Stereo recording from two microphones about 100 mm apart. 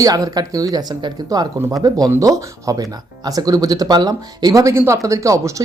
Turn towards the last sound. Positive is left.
turn(degrees=-35)  # may be behind; listen again after turning